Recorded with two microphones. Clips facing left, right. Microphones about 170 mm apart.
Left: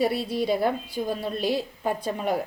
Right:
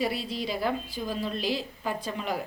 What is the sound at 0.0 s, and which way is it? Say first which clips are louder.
A woman's voice: left 6 dB; 55° left (ahead or behind).